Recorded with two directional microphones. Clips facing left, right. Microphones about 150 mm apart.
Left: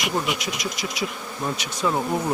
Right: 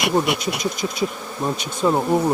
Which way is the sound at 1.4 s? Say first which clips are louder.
Right 5 dB; 30° right (ahead or behind).